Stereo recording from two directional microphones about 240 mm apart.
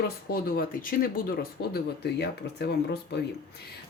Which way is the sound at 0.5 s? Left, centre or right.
Left.